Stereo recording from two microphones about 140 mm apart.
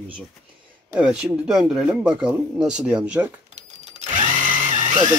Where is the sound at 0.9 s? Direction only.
5° right (ahead or behind).